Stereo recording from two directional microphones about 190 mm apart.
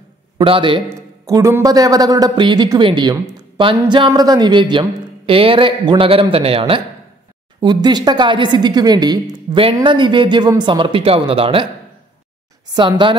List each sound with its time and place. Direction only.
0.4 s speech: 25° right (ahead or behind)
1.2 s speech: 15° right (ahead or behind)
12.7 s speech: 25° right (ahead or behind)